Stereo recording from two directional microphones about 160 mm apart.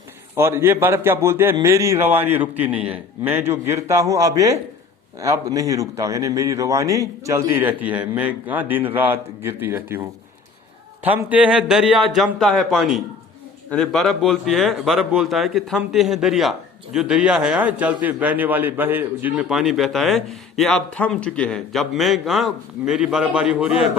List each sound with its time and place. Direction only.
0.3 s a man's voice: 15° right (ahead or behind)
11.0 s speech: 10° right (ahead or behind)